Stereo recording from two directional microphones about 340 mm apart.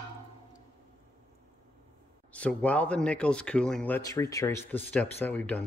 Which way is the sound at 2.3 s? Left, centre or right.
Centre.